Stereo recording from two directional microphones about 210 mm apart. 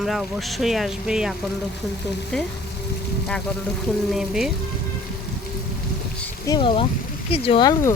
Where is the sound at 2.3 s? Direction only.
5° left (ahead or behind).